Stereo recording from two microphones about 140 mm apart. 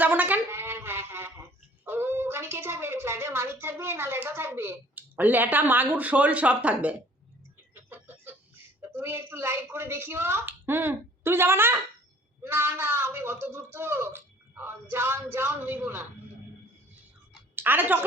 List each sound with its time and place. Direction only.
0.0 s a sound: 10° right (ahead or behind)
12.4 s a man's voice: 15° right (ahead or behind)
17.5 s a woman's voice: 15° right (ahead or behind)